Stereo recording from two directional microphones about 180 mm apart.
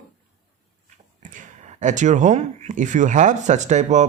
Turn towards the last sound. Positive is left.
turn(degrees=-40)  # may be behind; listen again after turning